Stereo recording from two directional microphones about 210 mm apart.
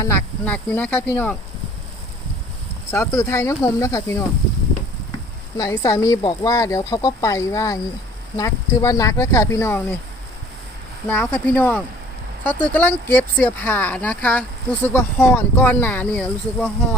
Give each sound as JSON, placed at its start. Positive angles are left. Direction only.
{"t": 0.0, "sound": "speech", "side_deg": 10}
{"t": 2.9, "sound": "speech", "side_deg": 15}
{"t": 5.5, "sound": "speech", "side_deg": 15}
{"t": 11.1, "sound": "speech", "side_deg": 10}